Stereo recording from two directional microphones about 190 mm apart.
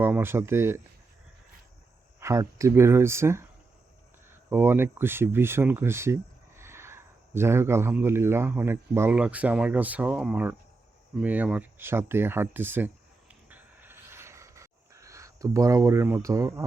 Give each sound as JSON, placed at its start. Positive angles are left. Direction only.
{"t": 0.0, "sound": "speech", "side_deg": -10}
{"t": 2.2, "sound": "speech", "side_deg": -15}
{"t": 13.5, "sound": "a sound", "side_deg": -10}